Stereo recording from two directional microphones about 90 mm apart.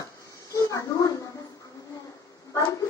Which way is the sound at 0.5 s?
40° left (ahead or behind).